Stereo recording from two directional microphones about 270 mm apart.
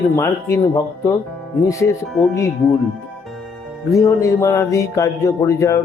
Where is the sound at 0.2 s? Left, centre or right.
Centre.